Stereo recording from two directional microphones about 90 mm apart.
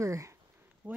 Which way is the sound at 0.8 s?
20° right (ahead or behind).